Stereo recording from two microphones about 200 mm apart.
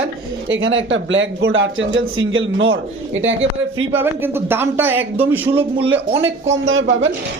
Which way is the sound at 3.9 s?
10° right (ahead or behind).